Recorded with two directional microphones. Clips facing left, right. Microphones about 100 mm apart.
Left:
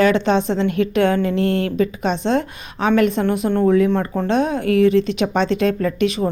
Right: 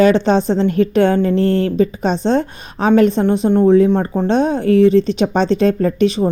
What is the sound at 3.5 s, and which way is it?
Speech, 15° right (ahead or behind).